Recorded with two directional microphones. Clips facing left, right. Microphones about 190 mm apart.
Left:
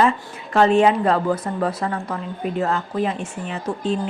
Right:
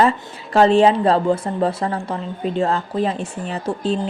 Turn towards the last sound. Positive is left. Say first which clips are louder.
# right 2 dB
turn(degrees=-35)  # may be behind; listen again after turning